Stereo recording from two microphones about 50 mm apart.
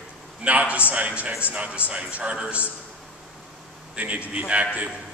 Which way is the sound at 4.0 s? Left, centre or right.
Right.